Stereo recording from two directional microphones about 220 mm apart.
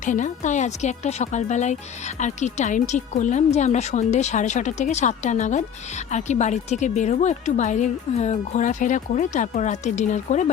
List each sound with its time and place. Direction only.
0.0 s a woman's voice: 35° left (ahead or behind)